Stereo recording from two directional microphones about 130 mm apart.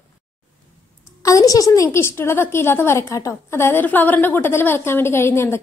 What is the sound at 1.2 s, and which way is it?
A woman's voice, 25° left (ahead or behind).